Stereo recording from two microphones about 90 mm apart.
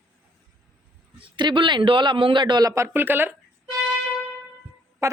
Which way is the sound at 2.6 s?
35° right (ahead or behind).